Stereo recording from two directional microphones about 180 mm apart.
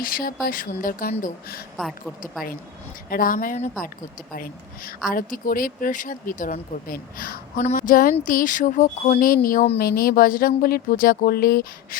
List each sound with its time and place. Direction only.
0.0 s speech: 55° left (ahead or behind)
1.7 s a woman's voice: centre (ahead or behind)
3.1 s speech: 50° left (ahead or behind)